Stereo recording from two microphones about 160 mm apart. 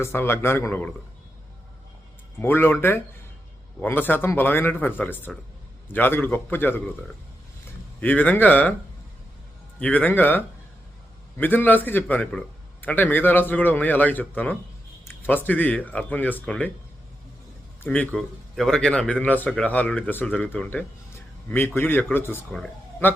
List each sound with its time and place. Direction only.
0.0 s a man's voice: 15° left (ahead or behind)
2.4 s a man's voice: 15° left (ahead or behind)
8.0 s a man's voice: 10° left (ahead or behind)
9.8 s a man's voice: 10° left (ahead or behind)
17.8 s a man's voice: 10° left (ahead or behind)